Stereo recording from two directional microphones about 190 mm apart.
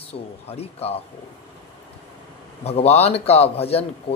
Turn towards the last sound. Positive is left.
turn(degrees=30)  # may be behind; listen again after turning